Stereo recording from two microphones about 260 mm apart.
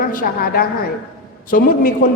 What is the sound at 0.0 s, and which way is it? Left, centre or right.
A woman's voice, left.